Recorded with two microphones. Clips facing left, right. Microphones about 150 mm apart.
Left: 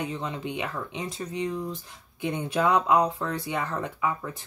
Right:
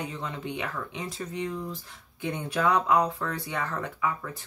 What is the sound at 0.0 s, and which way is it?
Speech, 20° left (ahead or behind).